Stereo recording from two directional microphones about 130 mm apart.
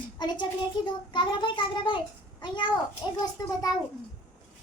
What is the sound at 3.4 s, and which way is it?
Speech, 25° left (ahead or behind).